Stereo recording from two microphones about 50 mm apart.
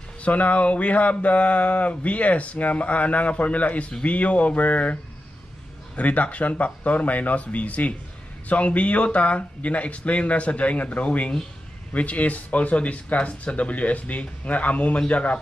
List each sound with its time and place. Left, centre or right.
0.2 s speech: left
5.9 s speech: left